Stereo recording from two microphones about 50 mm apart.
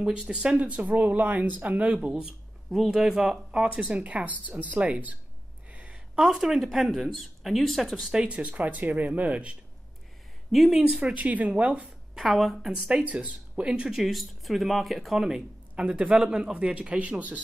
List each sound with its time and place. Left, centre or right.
0.3 s speech: centre
0.6 s speech: right
2.7 s speech: centre
3.9 s speech: right
5.7 s a sound: right
6.1 s speech: centre
8.3 s speech: right
10.5 s speech: centre
11.1 s a man's voice: right
12.2 s speech: centre
12.7 s speech: centre
13.0 s speech: right; by 15.4 s centre
15.7 s a man's voice: right